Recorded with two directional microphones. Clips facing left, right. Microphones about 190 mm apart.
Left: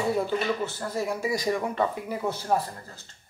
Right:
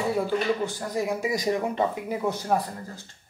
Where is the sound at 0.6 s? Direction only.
15° right (ahead or behind).